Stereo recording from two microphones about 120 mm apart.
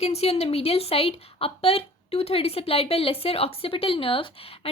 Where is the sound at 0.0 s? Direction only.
60° left (ahead or behind).